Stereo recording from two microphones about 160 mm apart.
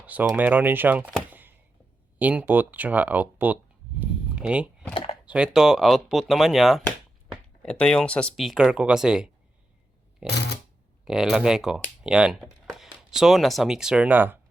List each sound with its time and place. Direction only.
0.0 s speech: 10° right (ahead or behind)
4.4 s power windows: 5° right (ahead or behind)
5.2 s speech: 5° right (ahead or behind)
10.2 s shuffling cards: 90° left
11.0 s speech: centre (ahead or behind)